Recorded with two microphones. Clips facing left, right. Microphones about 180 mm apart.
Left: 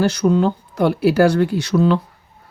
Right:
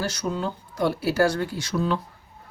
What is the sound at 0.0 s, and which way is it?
Speech, 60° left (ahead or behind).